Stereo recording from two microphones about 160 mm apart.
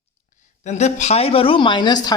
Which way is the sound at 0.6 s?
45° left (ahead or behind).